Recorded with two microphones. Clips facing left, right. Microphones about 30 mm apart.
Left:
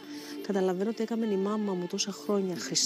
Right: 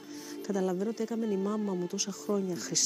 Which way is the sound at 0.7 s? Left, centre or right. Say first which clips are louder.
Left 2 dB; left.